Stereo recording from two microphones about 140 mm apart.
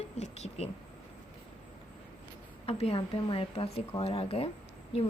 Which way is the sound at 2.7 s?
45° left (ahead or behind).